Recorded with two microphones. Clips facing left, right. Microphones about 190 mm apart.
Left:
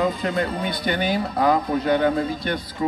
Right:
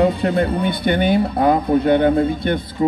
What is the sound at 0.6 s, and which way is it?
Speech, 55° right (ahead or behind).